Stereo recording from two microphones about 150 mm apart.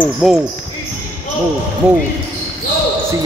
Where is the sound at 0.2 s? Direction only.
Centre (ahead or behind).